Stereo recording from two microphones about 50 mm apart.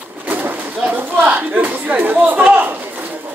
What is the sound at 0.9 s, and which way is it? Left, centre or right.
Speech, right.